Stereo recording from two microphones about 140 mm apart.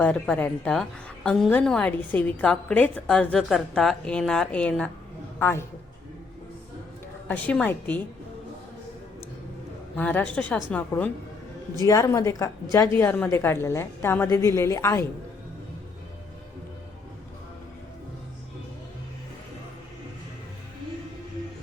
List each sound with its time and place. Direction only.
0.0 s a woman's voice: 10° left (ahead or behind)
7.3 s a woman's voice: 10° left (ahead or behind)
10.0 s a woman's voice: 10° left (ahead or behind)
11.9 s a woman's voice: 20° left (ahead or behind)